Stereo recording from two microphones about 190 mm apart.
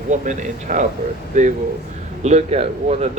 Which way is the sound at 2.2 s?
35° right (ahead or behind).